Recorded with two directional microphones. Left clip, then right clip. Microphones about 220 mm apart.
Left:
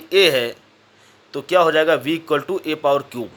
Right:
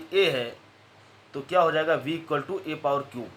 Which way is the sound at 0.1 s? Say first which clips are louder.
Left 9 dB; 50° left (ahead or behind).